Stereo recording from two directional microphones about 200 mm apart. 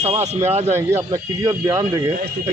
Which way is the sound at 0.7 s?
10° right (ahead or behind).